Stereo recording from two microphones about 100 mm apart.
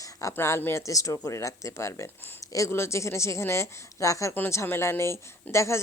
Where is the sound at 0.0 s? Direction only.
35° left (ahead or behind).